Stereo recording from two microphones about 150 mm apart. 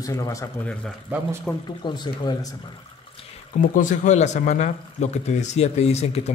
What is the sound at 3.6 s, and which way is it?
Speech, 60° left (ahead or behind).